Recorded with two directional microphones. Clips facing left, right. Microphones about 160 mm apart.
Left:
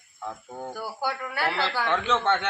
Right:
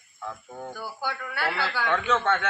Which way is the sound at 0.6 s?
10° left (ahead or behind).